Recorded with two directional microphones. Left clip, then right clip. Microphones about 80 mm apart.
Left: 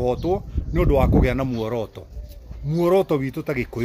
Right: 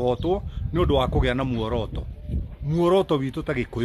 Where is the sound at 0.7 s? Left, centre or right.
Right.